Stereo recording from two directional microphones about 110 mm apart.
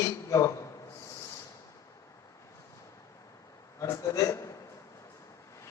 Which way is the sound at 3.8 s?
30° left (ahead or behind).